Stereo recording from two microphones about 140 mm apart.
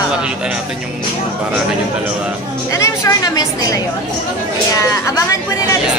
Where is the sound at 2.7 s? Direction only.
20° left (ahead or behind).